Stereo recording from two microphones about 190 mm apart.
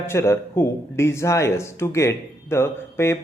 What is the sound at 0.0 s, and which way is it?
Speech, 15° left (ahead or behind).